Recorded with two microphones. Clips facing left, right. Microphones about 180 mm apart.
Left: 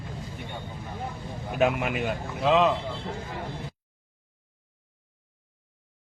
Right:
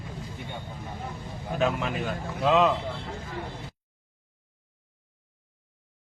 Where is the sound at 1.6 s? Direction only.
15° left (ahead or behind).